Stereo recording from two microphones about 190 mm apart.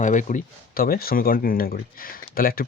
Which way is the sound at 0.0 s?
40° left (ahead or behind).